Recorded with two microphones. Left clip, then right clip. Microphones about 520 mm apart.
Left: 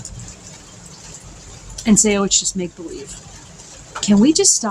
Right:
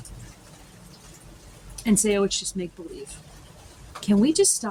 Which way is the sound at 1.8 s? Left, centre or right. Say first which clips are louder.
Left 6 dB; right.